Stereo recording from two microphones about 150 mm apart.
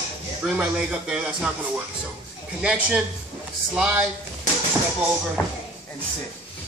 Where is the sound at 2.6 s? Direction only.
5° right (ahead or behind).